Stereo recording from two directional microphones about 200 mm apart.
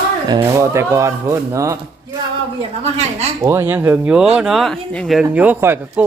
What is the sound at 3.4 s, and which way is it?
Speech, 15° right (ahead or behind).